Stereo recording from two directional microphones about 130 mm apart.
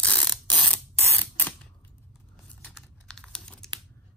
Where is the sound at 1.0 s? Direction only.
15° left (ahead or behind).